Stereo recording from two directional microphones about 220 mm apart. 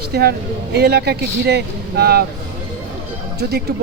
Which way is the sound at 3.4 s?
45° right (ahead or behind).